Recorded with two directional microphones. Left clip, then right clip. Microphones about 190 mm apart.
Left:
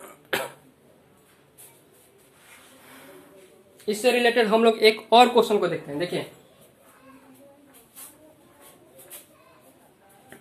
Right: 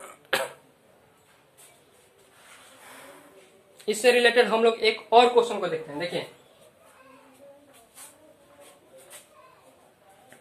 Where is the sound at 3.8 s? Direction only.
20° right (ahead or behind).